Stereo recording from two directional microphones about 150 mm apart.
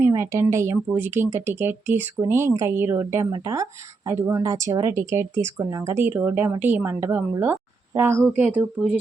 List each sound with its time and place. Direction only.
0.0 s speech: 20° right (ahead or behind)